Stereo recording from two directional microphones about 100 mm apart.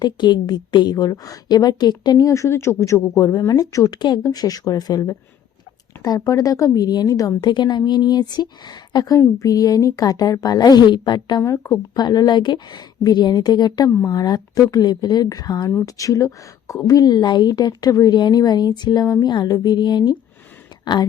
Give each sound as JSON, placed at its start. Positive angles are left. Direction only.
{"t": 0.0, "sound": "a woman's voice", "side_deg": 45}
{"t": 11.4, "sound": "speech", "side_deg": 30}
{"t": 11.9, "sound": "a woman's voice", "side_deg": 45}